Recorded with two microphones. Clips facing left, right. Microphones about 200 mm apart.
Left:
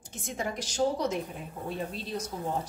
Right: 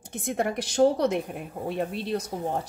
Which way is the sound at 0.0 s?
60° right (ahead or behind).